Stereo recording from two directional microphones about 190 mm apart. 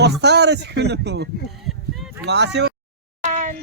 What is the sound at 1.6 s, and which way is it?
Honk, centre (ahead or behind).